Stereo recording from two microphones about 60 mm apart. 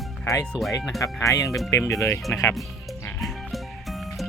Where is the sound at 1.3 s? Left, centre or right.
Left.